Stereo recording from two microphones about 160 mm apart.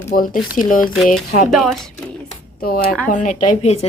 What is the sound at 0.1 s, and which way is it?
Speech, 65° left (ahead or behind).